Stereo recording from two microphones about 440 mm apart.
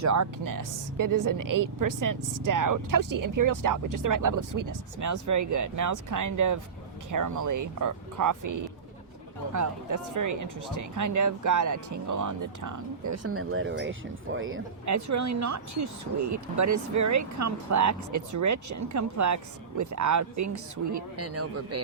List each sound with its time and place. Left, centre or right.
0.0 s a woman's voice: right
14.8 s speech: right